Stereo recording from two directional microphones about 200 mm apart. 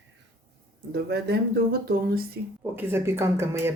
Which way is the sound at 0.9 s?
55° right (ahead or behind).